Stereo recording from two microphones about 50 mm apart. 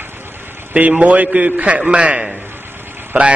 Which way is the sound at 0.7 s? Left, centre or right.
Right.